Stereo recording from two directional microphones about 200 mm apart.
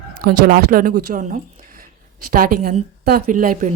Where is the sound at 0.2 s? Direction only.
50° right (ahead or behind).